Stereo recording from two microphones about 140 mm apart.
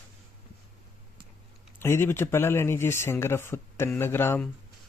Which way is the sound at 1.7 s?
15° left (ahead or behind).